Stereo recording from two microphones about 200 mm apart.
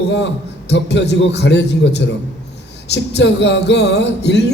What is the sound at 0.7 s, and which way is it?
A man's voice, 60° left (ahead or behind).